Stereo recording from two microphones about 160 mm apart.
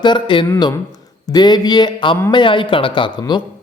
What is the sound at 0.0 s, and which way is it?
Speech, 30° left (ahead or behind).